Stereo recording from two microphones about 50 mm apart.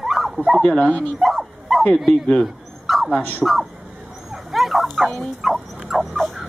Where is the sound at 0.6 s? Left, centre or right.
Left.